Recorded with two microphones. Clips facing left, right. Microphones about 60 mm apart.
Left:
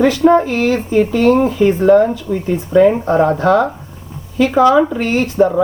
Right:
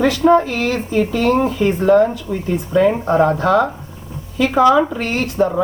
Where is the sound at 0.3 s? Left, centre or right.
Centre.